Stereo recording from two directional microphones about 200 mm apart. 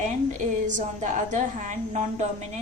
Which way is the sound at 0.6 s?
40° right (ahead or behind).